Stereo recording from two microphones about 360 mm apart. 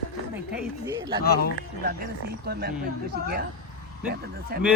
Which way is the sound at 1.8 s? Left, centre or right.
Right.